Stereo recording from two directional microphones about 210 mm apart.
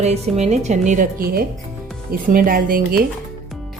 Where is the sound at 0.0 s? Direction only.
30° right (ahead or behind).